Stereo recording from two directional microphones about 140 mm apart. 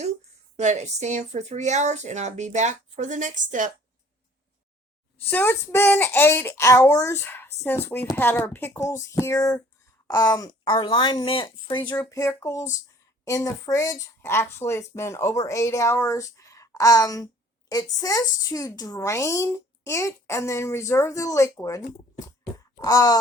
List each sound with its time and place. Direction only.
0.5 s speech: 55° right (ahead or behind)
5.3 s a child's voice: 15° left (ahead or behind); by 11.9 s 35° left (ahead or behind)
11.9 s speech: 20° left (ahead or behind)
22.5 s a sound: 25° left (ahead or behind)